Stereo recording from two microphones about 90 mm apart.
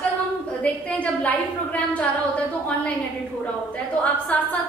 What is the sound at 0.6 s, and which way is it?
A woman's voice, 15° left (ahead or behind).